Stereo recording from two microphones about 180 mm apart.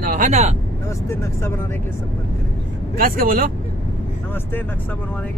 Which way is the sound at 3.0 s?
55° right (ahead or behind).